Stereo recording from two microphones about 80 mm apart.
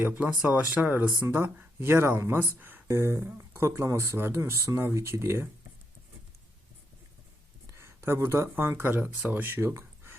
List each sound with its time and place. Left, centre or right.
0.2 s speech: centre
2.8 s speech: right
7.7 s speech: right